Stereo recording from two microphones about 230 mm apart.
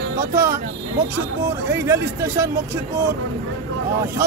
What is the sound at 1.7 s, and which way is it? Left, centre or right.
Speech, centre.